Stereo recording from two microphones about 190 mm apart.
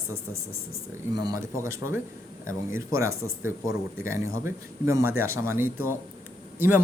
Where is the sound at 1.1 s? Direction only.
20° right (ahead or behind).